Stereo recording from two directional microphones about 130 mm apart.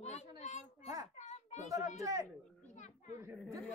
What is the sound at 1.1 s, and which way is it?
Children playing, 60° left (ahead or behind).